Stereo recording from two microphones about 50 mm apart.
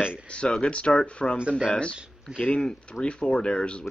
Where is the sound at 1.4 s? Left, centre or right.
Right.